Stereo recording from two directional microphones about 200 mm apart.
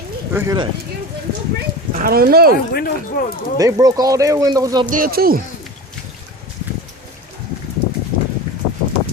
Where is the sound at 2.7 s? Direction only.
50° left (ahead or behind).